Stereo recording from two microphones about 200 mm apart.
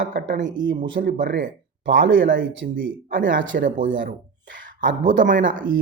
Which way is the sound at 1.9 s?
65° right (ahead or behind).